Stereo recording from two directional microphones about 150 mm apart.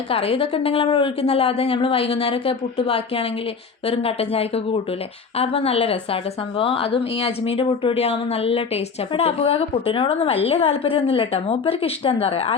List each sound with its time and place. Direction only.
0.1 s speech: 40° left (ahead or behind)